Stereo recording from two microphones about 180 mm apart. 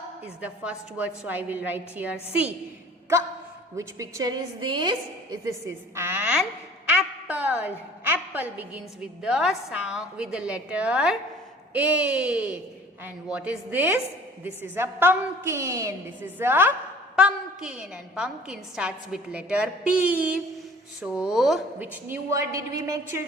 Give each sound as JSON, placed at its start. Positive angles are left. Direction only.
{"t": 0.4, "sound": "a woman's voice", "side_deg": -5}
{"t": 3.8, "sound": "a woman's voice", "side_deg": -15}